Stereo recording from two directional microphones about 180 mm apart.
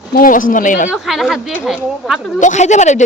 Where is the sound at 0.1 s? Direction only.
50° left (ahead or behind).